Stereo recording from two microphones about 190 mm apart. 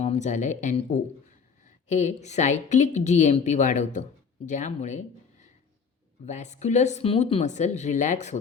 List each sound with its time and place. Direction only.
0.0 s speech: 35° left (ahead or behind)
1.9 s a woman's voice: 40° left (ahead or behind)